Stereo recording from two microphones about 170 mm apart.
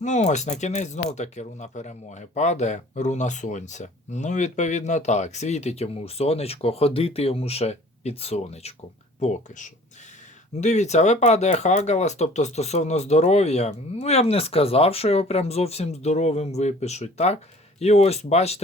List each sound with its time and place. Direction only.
0.0 s speech: 45° left (ahead or behind)